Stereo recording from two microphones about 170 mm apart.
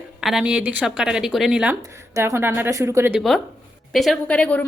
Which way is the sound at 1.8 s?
15° right (ahead or behind).